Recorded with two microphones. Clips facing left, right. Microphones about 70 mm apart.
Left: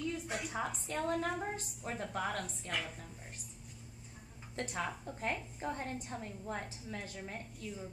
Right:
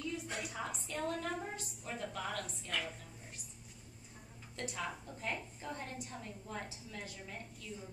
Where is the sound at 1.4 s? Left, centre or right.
Left.